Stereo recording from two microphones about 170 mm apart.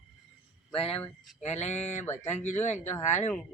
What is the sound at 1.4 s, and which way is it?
Speech, 40° left (ahead or behind).